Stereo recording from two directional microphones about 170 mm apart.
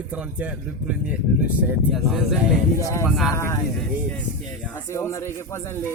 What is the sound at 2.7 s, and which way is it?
Speech, 15° left (ahead or behind).